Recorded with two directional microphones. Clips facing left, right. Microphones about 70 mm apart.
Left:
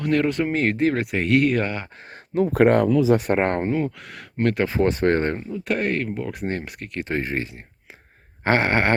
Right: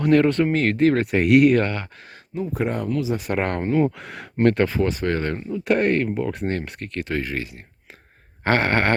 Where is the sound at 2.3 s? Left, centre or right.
Left.